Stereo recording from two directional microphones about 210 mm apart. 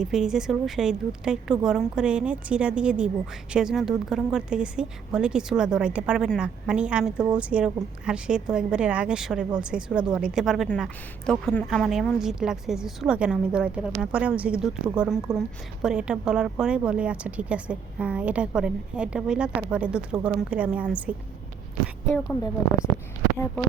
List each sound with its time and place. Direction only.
0.0 s a woman's voice: 5° right (ahead or behind)